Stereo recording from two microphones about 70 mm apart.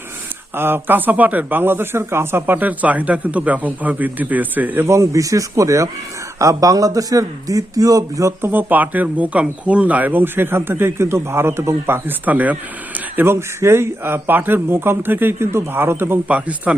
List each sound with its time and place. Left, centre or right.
0.5 s speech: right
2.6 s speech: right
4.9 s a man's voice: right
8.4 s speech: right
13.1 s speech: right
16.3 s speech: centre